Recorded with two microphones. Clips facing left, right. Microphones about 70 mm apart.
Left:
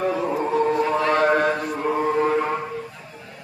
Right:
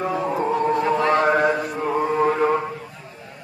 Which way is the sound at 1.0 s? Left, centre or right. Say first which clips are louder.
Right 1 dB; right.